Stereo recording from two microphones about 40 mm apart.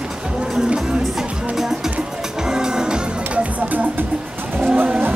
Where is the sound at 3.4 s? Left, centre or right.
Right.